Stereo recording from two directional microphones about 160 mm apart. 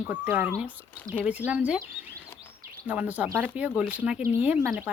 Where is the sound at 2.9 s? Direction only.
10° right (ahead or behind).